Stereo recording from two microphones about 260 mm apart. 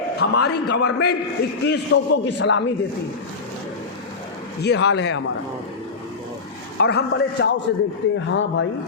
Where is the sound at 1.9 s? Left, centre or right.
Left.